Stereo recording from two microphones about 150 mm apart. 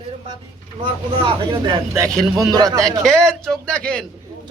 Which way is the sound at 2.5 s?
25° right (ahead or behind).